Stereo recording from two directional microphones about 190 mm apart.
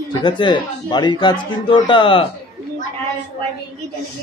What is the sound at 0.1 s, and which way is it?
Speech, 25° left (ahead or behind).